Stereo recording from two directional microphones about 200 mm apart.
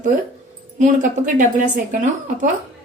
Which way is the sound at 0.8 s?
40° right (ahead or behind).